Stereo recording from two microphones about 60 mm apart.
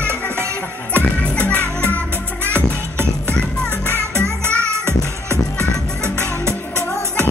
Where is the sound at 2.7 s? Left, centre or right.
Right.